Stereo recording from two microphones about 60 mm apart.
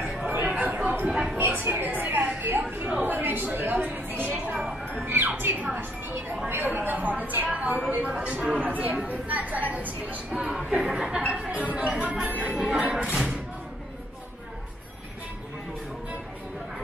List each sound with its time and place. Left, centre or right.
0.3 s chatter: right
0.8 s a sound: right
5.0 s music: right
5.8 s a woman's voice: right; by 12.8 s centre